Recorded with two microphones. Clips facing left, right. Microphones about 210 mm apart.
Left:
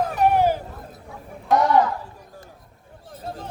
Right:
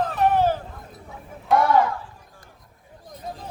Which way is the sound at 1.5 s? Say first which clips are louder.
Left 1 dB; 20° left (ahead or behind).